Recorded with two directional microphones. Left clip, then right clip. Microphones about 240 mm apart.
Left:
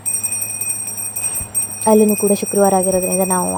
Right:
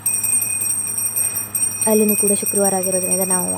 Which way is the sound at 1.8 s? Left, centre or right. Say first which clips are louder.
Left 5 dB; centre.